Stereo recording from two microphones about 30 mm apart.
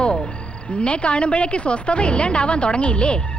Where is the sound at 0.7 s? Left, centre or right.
Left.